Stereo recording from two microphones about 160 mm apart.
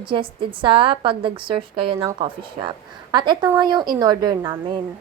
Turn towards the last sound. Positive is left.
turn(degrees=-25)  # may be behind; listen again after turning